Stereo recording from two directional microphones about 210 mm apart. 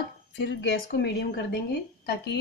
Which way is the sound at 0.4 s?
55° left (ahead or behind).